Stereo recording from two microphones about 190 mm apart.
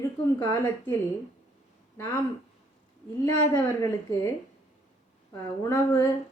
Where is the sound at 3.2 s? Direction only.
15° left (ahead or behind).